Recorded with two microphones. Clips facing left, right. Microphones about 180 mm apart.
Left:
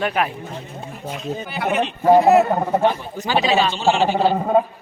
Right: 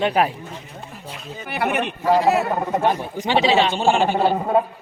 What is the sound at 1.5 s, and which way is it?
Speech, 60° right (ahead or behind).